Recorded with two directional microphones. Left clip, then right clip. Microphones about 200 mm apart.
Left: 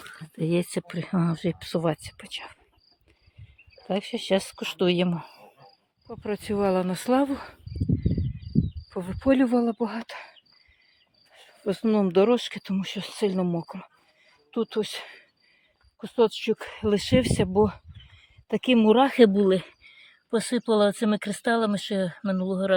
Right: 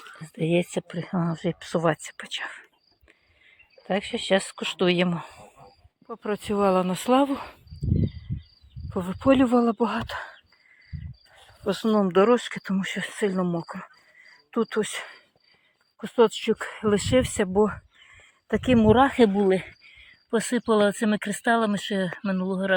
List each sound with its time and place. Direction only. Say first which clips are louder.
0.3 s speech: right 2 dB; 10° left (ahead or behind)
3.8 s speech: right 2 dB; 10° left (ahead or behind)
8.9 s speech: right 3 dB; centre (ahead or behind)
11.3 s speech: right 1 dB; 10° left (ahead or behind)
12.3 s speech: right 2 dB; centre (ahead or behind)
16.0 s speech: right 2 dB; 10° right (ahead or behind); by 22.7 s 15° left (ahead or behind)